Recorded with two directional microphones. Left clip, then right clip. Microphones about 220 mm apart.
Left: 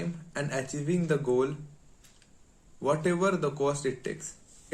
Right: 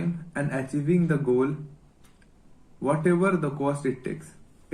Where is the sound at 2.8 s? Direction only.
25° left (ahead or behind).